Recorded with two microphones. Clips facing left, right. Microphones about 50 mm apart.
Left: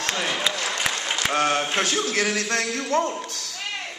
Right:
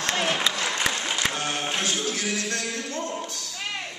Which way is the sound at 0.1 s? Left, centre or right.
Right.